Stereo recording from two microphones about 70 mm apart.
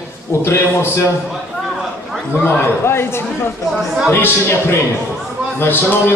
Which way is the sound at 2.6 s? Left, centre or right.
Left.